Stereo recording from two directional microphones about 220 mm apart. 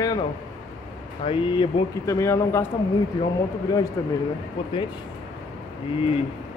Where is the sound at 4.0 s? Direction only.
15° left (ahead or behind).